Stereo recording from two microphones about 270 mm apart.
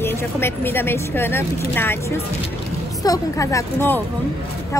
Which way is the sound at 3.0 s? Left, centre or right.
Centre.